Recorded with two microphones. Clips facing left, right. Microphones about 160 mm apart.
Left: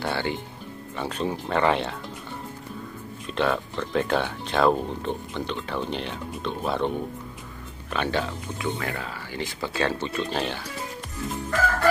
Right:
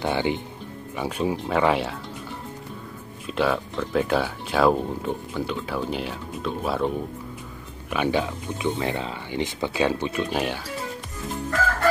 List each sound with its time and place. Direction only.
0.0 s speech: 15° right (ahead or behind)
3.3 s speech: 5° right (ahead or behind)